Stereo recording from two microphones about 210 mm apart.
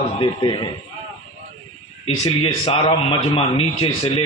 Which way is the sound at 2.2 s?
30° left (ahead or behind).